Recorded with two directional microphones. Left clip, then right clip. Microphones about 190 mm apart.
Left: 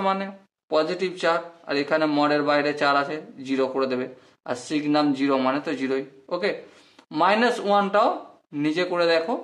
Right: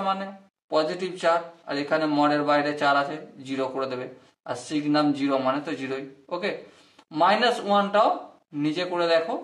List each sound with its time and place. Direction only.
0.0 s speech: 40° left (ahead or behind)